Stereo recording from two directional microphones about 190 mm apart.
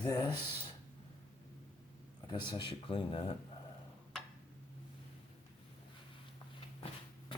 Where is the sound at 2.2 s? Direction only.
25° left (ahead or behind).